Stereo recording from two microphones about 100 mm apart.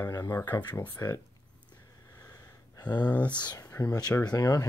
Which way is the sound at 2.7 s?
45° left (ahead or behind).